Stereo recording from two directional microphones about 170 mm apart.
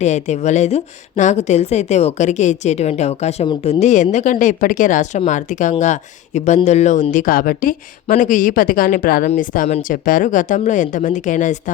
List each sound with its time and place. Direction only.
0.0 s a woman's voice: 40° left (ahead or behind)